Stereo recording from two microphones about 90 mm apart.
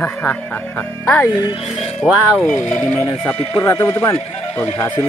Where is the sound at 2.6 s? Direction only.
30° left (ahead or behind).